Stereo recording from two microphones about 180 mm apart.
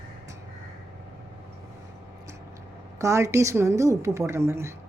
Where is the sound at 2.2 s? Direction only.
15° right (ahead or behind).